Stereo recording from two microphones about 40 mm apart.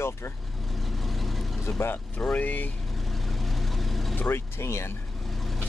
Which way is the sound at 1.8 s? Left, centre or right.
Left.